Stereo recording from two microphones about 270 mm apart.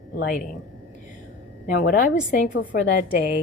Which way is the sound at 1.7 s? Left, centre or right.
Left.